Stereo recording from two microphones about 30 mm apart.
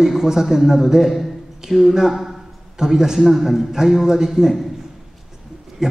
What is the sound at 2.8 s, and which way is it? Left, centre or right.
Speech, right.